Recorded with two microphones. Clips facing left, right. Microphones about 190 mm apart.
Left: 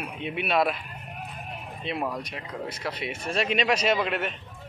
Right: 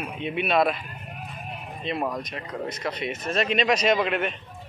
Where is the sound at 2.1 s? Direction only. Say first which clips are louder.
Right 2 dB; 10° left (ahead or behind).